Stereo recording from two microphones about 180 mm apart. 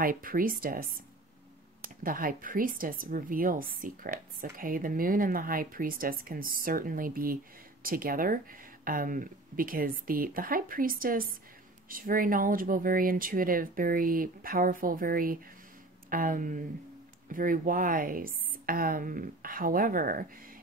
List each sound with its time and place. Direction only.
0.0 s a woman's voice: 50° right (ahead or behind)
2.0 s a woman's voice: 50° right (ahead or behind)